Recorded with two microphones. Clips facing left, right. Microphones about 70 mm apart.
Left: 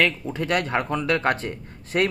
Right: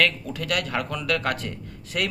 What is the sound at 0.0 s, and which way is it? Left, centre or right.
Speech, left.